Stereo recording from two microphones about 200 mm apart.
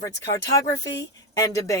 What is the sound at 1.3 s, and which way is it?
Speech, 15° left (ahead or behind).